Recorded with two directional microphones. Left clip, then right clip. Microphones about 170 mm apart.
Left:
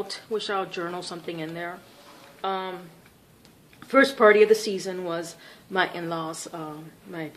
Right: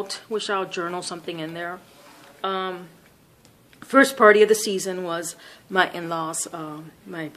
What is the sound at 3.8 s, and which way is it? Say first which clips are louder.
A woman's voice: right 3 dB; 35° right (ahead or behind).